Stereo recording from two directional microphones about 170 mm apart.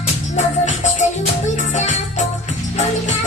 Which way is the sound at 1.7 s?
45° left (ahead or behind).